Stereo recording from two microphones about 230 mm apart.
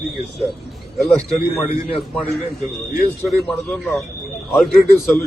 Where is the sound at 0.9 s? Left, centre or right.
Centre.